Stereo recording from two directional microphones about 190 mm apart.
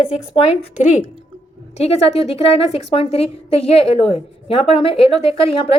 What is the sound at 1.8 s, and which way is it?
A woman's voice, 35° left (ahead or behind).